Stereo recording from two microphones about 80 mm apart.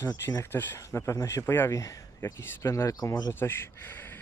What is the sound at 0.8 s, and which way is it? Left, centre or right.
Speech, left.